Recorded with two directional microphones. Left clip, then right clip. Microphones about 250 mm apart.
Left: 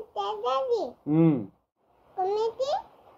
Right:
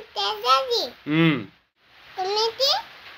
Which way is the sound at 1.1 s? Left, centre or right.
Right.